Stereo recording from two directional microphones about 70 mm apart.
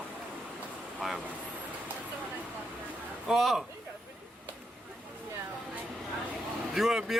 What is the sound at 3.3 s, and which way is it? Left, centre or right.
Speech, centre.